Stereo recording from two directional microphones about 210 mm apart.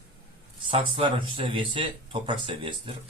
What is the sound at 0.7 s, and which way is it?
Speech, 25° right (ahead or behind).